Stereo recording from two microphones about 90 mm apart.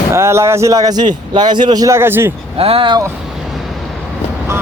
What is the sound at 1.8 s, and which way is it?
Speech, 30° right (ahead or behind).